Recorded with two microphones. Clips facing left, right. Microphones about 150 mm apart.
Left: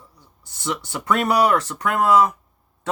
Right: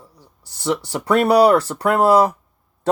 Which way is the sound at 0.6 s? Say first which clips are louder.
Right 6 dB; 35° right (ahead or behind).